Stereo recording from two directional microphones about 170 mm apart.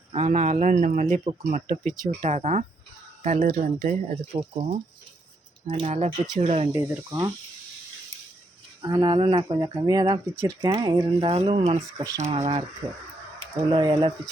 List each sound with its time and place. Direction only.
0.1 s a man's voice: 40° right (ahead or behind)
4.4 s speech: 35° right (ahead or behind)
6.7 s speech: 15° right (ahead or behind)
8.8 s speech: 25° right (ahead or behind)
11.9 s speech: 20° right (ahead or behind)
12.3 s speech: 40° right (ahead or behind)
13.7 s speech: 25° right (ahead or behind)